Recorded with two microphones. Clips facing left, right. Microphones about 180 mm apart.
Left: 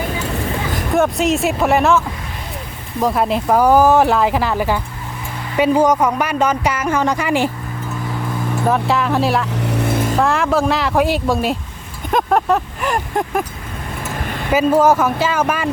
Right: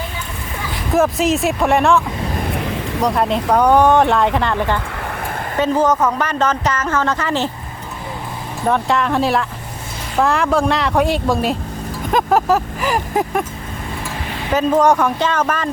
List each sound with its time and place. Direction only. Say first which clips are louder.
0.9 s speech: right 1 dB; centre (ahead or behind)
3.0 s speech: left 1 dB; centre (ahead or behind)
8.7 s speech: right 2 dB; centre (ahead or behind)
9.8 s vehicle: left 14 dB; 55° left (ahead or behind)
10.2 s speech: right 3 dB; centre (ahead or behind)
14.5 s speech: left 1 dB; 5° left (ahead or behind)